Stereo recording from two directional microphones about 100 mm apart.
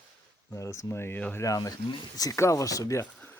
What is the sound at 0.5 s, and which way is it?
Speech, 30° left (ahead or behind).